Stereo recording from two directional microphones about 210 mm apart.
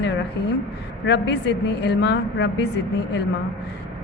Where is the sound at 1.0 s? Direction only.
55° left (ahead or behind).